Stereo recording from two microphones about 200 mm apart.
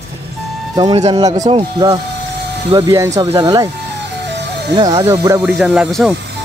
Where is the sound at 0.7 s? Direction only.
30° right (ahead or behind).